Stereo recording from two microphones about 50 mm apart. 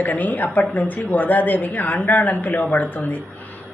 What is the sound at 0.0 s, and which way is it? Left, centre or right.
A woman's voice, left.